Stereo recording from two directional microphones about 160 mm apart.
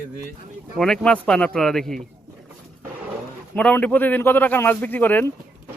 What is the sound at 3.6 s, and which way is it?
Speech, 10° left (ahead or behind).